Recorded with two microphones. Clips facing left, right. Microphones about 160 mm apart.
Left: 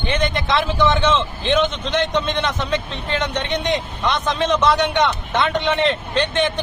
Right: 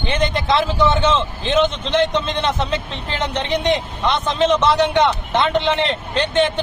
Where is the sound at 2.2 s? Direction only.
30° right (ahead or behind).